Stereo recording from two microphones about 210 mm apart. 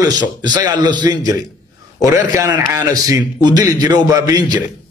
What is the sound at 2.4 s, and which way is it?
Speech, 15° right (ahead or behind).